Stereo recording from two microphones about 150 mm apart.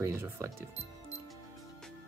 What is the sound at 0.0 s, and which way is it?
Speech, 20° right (ahead or behind).